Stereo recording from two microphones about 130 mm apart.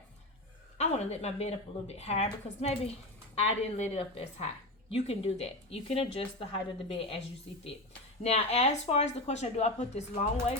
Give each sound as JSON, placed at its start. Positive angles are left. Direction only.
{"t": 0.8, "sound": "a woman's voice", "side_deg": 55}
{"t": 8.2, "sound": "a woman's voice", "side_deg": 55}